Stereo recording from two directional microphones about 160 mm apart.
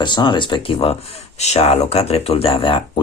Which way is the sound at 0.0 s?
30° left (ahead or behind).